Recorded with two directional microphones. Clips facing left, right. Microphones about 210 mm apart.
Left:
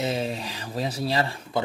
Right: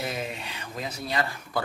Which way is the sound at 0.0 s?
30° left (ahead or behind).